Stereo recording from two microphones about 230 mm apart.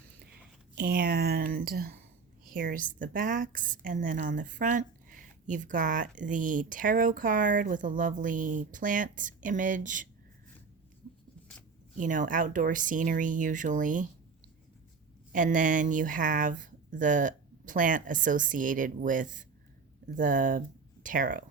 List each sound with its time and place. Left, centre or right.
0.8 s a woman's voice: right
11.9 s a woman's voice: right
15.3 s a woman's voice: right